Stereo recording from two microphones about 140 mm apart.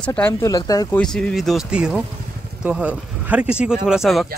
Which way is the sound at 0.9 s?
5° left (ahead or behind).